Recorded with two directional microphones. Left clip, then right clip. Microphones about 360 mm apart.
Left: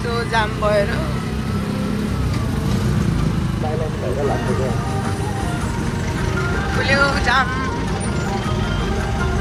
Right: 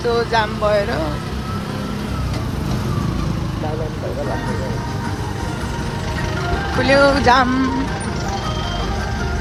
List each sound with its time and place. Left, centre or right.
0.1 s speech: centre
6.8 s speech: centre